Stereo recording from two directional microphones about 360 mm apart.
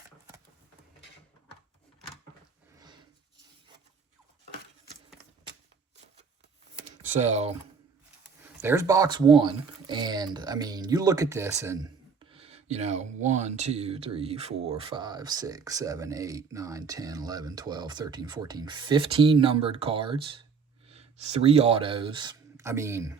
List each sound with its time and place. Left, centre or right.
2.8 s a sound: centre
6.7 s computer keyboard: centre
8.4 s speech: centre